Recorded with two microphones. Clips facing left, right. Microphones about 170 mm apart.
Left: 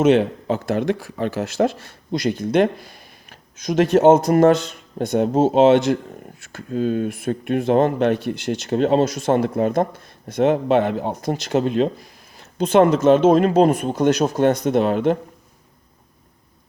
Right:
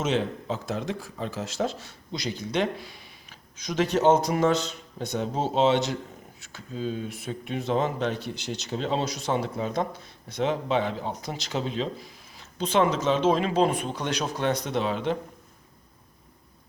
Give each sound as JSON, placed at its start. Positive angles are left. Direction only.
{"t": 0.0, "sound": "speech", "side_deg": 60}